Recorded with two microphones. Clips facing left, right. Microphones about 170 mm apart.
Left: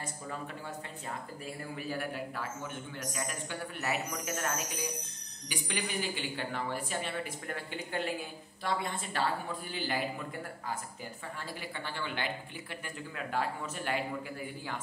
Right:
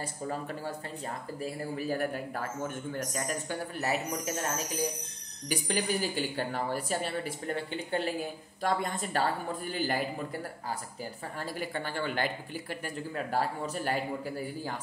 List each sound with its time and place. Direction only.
1.4 s a man's voice: 40° right (ahead or behind)
8.6 s speech: 45° right (ahead or behind)
11.3 s a man's voice: 45° right (ahead or behind)